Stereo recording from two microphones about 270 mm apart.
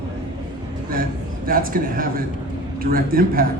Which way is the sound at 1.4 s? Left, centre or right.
Right.